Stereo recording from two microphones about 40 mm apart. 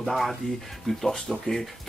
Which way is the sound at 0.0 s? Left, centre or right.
Centre.